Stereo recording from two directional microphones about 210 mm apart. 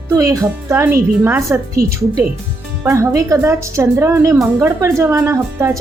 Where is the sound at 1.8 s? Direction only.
45° right (ahead or behind).